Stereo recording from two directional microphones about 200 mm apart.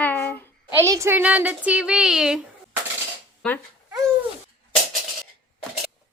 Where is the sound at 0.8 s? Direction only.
15° right (ahead or behind).